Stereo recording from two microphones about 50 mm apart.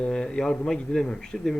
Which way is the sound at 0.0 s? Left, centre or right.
Centre.